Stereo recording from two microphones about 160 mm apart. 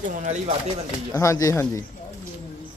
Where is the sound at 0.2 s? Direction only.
45° right (ahead or behind).